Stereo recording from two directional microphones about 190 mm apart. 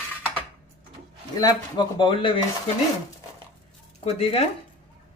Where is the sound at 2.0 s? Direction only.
25° left (ahead or behind).